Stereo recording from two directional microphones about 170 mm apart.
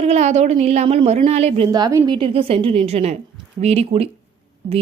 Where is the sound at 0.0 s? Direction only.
40° right (ahead or behind).